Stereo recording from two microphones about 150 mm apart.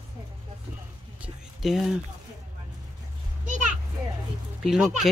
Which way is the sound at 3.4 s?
60° right (ahead or behind).